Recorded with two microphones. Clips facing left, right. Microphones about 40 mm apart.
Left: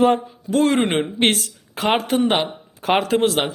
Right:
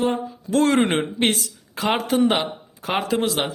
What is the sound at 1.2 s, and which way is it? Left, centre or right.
Speech, left.